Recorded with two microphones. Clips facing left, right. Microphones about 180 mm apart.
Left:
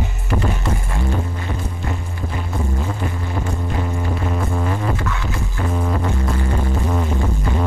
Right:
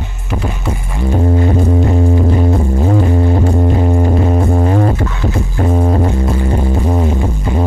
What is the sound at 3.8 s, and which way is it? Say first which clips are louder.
Music: right 10 dB; 45° right (ahead or behind).